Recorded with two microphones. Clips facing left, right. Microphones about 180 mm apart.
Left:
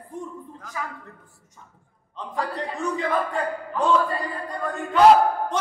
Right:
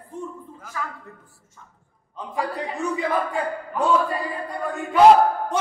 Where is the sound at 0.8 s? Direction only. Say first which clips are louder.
Right 1 dB; 15° left (ahead or behind).